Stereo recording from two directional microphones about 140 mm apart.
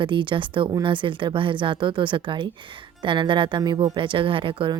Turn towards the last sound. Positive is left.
turn(degrees=-35)  # may be behind; listen again after turning